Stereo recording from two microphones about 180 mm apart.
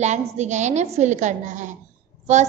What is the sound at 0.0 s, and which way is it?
Child singing, 40° right (ahead or behind).